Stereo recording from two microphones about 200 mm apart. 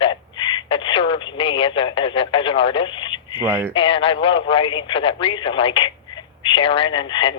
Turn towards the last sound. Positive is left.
turn(degrees=25)  # may be behind; listen again after turning